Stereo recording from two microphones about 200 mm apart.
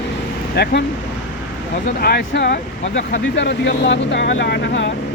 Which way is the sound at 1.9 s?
50° left (ahead or behind).